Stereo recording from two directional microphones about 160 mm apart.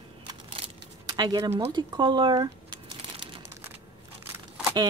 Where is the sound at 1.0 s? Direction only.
25° right (ahead or behind).